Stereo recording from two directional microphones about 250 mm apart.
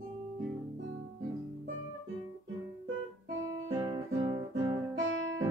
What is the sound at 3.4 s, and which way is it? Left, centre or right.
Guitar, centre.